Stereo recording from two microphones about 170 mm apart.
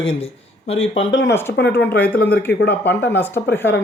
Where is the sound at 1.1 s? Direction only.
90° left.